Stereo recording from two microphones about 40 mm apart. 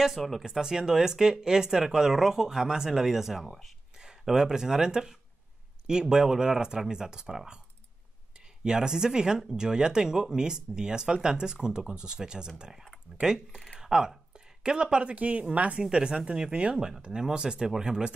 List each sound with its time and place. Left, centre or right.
0.4 s speech: centre
3.4 s speech: centre
4.2 s speech: centre
8.6 s speech: centre
13.7 s a sound: centre
14.6 s a woman's voice: right
15.8 s speech: right